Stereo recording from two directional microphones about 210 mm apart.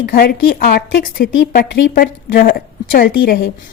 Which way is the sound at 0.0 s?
45° left (ahead or behind).